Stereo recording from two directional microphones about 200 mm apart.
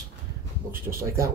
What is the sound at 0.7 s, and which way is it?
Speech, 10° right (ahead or behind).